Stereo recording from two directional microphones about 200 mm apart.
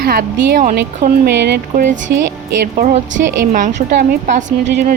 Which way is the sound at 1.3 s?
55° right (ahead or behind).